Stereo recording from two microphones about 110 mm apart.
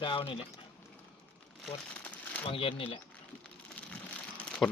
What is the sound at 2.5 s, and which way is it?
Speech, 55° left (ahead or behind).